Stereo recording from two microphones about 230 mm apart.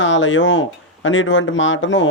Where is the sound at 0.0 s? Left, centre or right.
Left.